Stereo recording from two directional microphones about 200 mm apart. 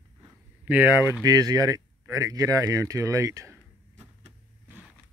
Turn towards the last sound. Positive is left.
turn(degrees=-15)  # may be behind; listen again after turning